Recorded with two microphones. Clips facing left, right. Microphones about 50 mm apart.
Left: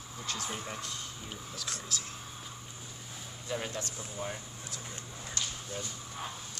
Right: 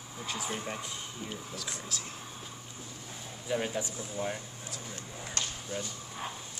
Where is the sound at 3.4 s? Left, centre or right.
Centre.